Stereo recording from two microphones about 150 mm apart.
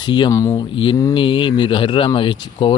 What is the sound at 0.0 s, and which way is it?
Speech, 30° left (ahead or behind).